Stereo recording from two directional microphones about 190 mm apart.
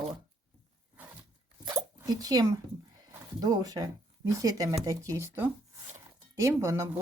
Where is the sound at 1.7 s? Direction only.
15° right (ahead or behind).